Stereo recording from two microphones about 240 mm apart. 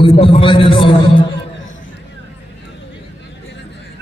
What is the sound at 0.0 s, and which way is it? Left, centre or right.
A man's voice, left.